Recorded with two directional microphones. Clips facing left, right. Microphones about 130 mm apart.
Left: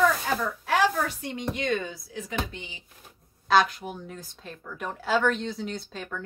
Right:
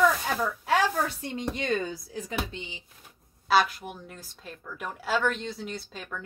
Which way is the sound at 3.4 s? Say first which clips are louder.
Left 2 dB; 5° right (ahead or behind).